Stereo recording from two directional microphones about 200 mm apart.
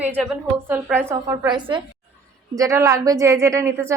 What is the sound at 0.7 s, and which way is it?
A woman's voice, 10° right (ahead or behind).